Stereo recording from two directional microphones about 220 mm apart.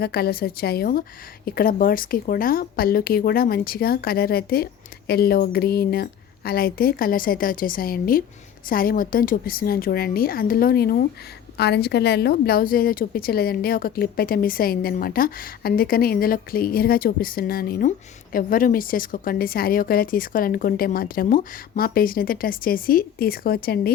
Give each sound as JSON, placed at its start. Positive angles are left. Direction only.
{"t": 0.0, "sound": "a woman's voice", "side_deg": 45}